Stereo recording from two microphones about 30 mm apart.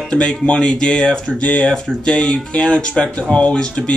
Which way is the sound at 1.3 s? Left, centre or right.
Left.